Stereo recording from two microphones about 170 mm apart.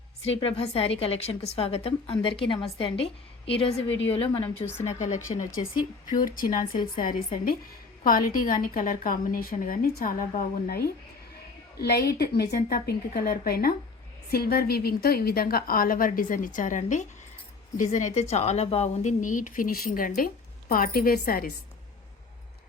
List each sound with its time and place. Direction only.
0.3 s a woman's voice: 35° left (ahead or behind)
3.8 s a woman's voice: 90° left
4.1 s a woman's voice: 30° left (ahead or behind)
4.8 s speech: 45° left (ahead or behind)
8.0 s a woman's voice: 55° left (ahead or behind)